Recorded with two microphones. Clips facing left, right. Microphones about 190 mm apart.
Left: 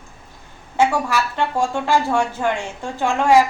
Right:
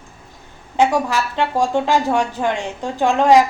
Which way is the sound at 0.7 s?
15° right (ahead or behind).